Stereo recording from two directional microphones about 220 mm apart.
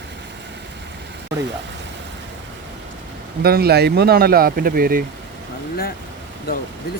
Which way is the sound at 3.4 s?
45° right (ahead or behind).